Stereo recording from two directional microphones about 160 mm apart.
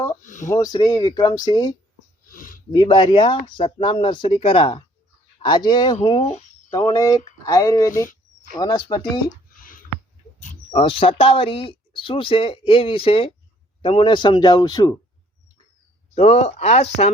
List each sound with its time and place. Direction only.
0.2 s speech: 50° left (ahead or behind)
0.5 s speech: 25° left (ahead or behind)
2.2 s a sound: 60° left (ahead or behind)
2.7 s speech: 30° left (ahead or behind)
6.0 s speech: 40° left (ahead or behind)
6.7 s speech: 20° left (ahead or behind)
9.6 s a sound: 60° left (ahead or behind)
10.7 s speech: 35° left (ahead or behind)
16.1 s speech: 40° left (ahead or behind)